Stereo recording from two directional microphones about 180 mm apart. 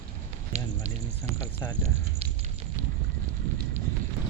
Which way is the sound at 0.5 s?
35° right (ahead or behind).